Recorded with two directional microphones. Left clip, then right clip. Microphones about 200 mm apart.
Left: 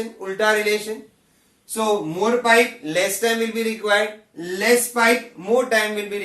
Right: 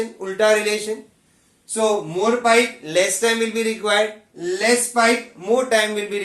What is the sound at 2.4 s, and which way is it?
Speech, 20° right (ahead or behind).